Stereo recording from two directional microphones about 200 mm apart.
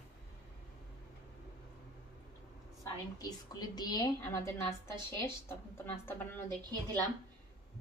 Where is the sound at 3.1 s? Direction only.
20° left (ahead or behind).